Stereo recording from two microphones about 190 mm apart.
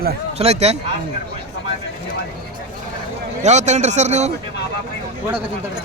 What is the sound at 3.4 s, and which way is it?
Speech, 35° right (ahead or behind).